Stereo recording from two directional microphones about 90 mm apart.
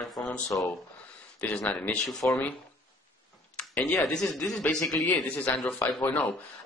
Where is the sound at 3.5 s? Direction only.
10° left (ahead or behind).